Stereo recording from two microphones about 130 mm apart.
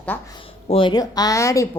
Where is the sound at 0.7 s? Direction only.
45° left (ahead or behind).